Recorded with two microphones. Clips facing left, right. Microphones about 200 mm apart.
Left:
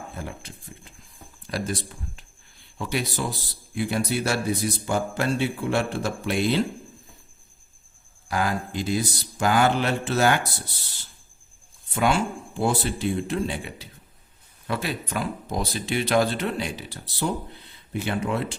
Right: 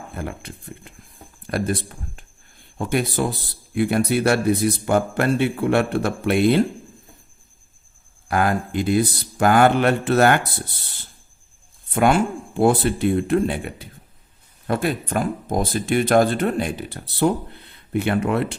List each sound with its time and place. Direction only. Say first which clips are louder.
0.2 s a man's voice: right 10 dB; 60° right (ahead or behind)
8.3 s a man's voice: right 5 dB; 55° right (ahead or behind)